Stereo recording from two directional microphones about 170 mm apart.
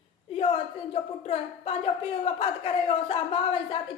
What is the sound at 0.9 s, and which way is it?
A woman's voice, 35° left (ahead or behind).